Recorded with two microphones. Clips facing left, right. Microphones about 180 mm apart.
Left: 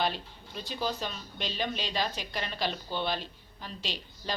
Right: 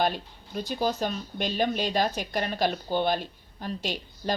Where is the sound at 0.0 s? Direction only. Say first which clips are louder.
Right 4 dB; 50° right (ahead or behind).